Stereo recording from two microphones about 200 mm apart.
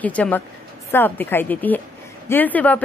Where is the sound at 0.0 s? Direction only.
5° left (ahead or behind).